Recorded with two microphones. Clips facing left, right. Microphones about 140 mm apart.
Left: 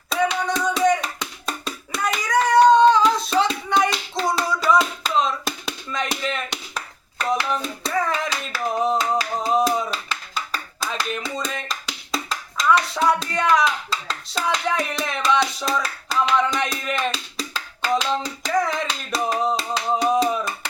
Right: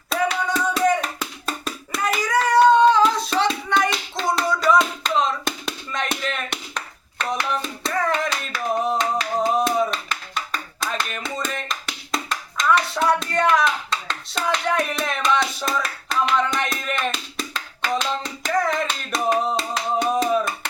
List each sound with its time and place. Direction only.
0.1 s hands: 5° right (ahead or behind)